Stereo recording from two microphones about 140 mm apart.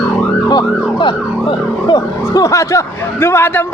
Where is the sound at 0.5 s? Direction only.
35° left (ahead or behind).